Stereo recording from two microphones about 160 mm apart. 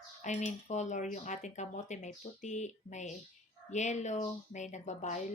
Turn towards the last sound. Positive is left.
turn(degrees=45)  # may be behind; listen again after turning